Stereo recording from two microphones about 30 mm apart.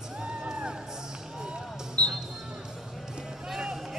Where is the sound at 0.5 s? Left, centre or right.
Right.